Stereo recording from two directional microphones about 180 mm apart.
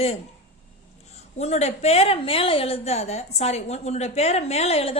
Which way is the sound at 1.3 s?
35° left (ahead or behind).